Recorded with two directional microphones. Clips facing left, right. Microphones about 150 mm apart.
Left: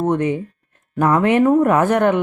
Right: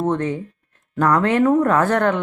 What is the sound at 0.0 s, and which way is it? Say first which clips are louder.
A woman's voice: left 3 dB; 15° left (ahead or behind).